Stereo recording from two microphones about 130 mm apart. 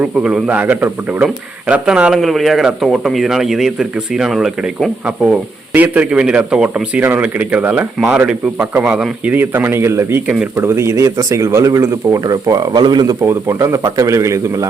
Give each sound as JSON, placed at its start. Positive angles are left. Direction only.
{"t": 0.0, "sound": "a man's voice", "side_deg": -5}
{"t": 13.2, "sound": "a man's voice", "side_deg": -20}